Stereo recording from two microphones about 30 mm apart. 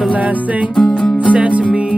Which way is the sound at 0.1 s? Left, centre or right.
Right.